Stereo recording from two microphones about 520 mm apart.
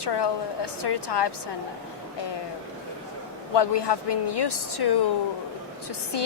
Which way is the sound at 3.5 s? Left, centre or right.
Left.